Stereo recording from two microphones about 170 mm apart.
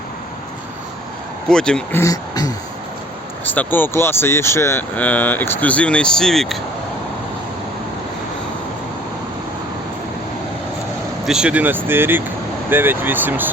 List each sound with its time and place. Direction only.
1.5 s speech: 5° left (ahead or behind)
2.0 s speech: 20° left (ahead or behind)
3.4 s speech: 10° left (ahead or behind)
11.3 s speech: 5° right (ahead or behind)